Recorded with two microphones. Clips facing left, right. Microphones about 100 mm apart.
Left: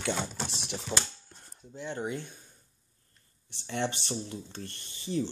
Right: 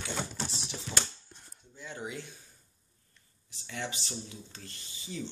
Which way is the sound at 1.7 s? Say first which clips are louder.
Left 6 dB; 55° left (ahead or behind).